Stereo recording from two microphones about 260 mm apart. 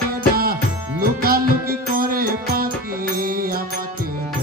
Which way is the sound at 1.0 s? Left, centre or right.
Right.